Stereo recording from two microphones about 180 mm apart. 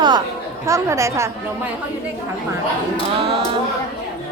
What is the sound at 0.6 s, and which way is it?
Speech, 15° right (ahead or behind).